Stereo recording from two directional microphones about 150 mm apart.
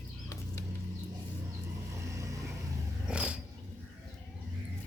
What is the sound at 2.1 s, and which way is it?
Vehicle, 20° right (ahead or behind).